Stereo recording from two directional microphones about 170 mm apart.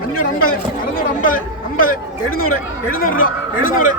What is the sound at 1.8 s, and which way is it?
A man's voice, 55° left (ahead or behind).